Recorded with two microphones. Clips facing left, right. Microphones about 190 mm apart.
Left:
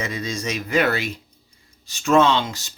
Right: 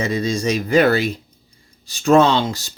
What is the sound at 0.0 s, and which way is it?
Speech, 30° right (ahead or behind).